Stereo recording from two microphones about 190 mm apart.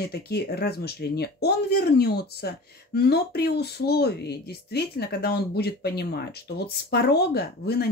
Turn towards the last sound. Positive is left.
turn(degrees=55)  # may be behind; listen again after turning